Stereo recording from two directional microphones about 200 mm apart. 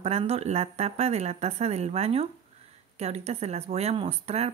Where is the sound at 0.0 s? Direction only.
30° right (ahead or behind).